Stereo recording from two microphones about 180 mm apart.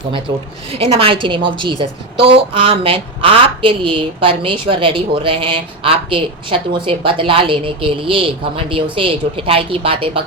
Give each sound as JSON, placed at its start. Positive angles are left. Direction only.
{"t": 0.7, "sound": "a woman's voice", "side_deg": -30}